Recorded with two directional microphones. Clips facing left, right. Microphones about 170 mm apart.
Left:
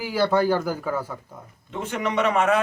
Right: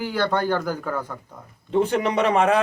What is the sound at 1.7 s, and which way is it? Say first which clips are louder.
Speech: right 6 dB; 35° right (ahead or behind).